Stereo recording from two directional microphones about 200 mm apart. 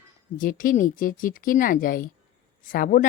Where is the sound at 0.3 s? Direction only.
45° left (ahead or behind).